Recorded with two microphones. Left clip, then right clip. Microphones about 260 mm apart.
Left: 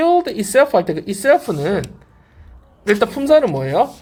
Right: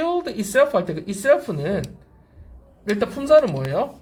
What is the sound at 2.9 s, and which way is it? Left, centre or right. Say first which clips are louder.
Speech: left 3 dB; left.